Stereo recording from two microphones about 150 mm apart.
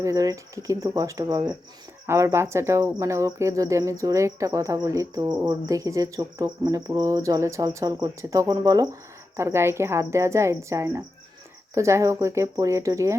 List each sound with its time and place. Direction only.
0.0 s speech: 20° right (ahead or behind)